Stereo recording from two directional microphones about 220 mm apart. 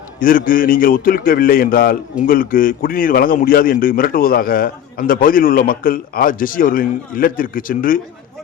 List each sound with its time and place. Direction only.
0.2 s a man's voice: 40° left (ahead or behind)